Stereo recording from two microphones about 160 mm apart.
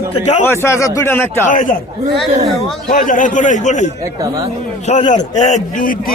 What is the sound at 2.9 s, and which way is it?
A man's voice, 55° left (ahead or behind).